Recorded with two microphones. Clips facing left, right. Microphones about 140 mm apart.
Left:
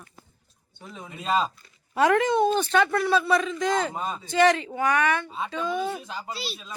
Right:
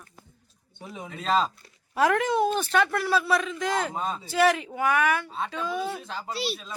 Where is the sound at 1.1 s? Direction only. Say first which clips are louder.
Even; 10° left (ahead or behind).